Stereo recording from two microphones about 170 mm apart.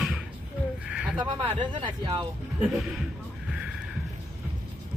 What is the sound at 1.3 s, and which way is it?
Speech, 30° right (ahead or behind).